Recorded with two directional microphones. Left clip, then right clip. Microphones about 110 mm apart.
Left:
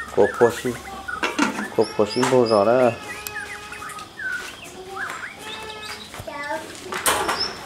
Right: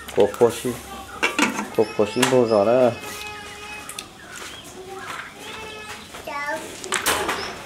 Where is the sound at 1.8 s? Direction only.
5° left (ahead or behind).